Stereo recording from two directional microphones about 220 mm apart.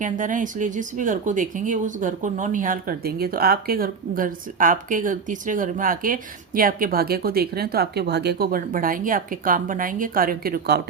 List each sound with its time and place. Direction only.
0.0 s speech: 35° right (ahead or behind)